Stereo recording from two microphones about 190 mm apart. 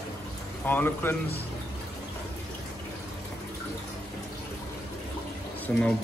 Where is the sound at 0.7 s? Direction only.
10° left (ahead or behind).